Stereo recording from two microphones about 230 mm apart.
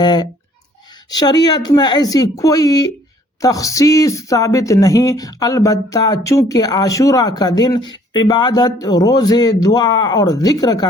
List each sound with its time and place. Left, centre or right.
0.0 s speech: centre